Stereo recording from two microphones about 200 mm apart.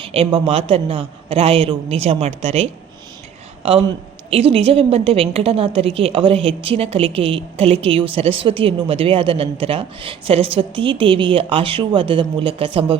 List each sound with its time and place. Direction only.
0.0 s a woman's voice: 25° right (ahead or behind)